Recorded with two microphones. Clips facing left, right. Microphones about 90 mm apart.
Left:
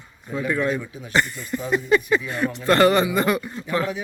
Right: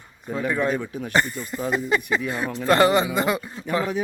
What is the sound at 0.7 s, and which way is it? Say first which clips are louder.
Speech: right 1 dB; 50° right (ahead or behind).